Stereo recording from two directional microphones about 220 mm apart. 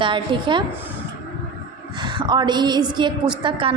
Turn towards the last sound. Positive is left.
turn(degrees=-20)  # may be behind; listen again after turning